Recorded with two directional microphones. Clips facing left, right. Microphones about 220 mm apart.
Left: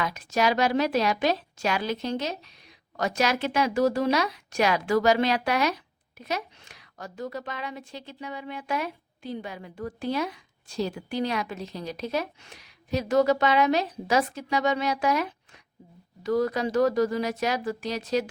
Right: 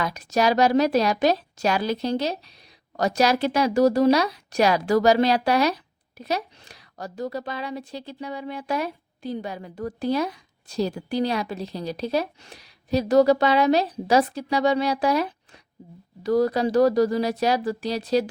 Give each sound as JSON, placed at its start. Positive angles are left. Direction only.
{"t": 0.0, "sound": "speech", "side_deg": -40}